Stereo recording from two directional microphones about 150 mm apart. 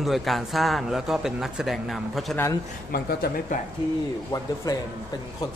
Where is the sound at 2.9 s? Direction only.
90° left.